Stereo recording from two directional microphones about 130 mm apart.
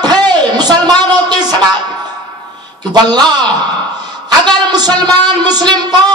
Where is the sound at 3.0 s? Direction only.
35° right (ahead or behind).